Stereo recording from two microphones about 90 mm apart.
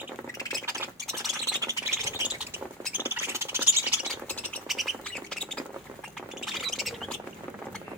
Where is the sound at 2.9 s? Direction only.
25° right (ahead or behind).